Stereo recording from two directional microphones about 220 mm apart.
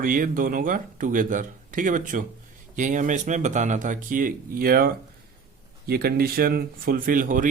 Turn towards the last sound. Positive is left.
turn(degrees=-40)  # may be behind; listen again after turning